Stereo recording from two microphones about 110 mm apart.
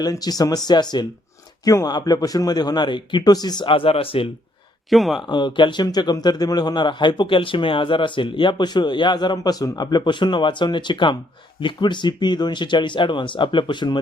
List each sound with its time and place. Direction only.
0.0 s a man's voice: 35° left (ahead or behind); by 4.3 s 55° left (ahead or behind)
4.9 s speech: centre (ahead or behind)
5.2 s speech: 45° left (ahead or behind)